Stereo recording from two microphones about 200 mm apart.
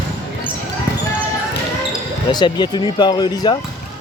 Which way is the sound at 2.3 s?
20° left (ahead or behind).